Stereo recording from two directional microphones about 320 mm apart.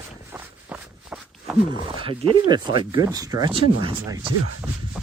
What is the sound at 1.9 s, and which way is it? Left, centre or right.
Speech, centre.